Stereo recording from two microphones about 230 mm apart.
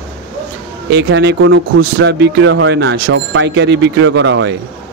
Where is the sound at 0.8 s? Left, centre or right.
Right.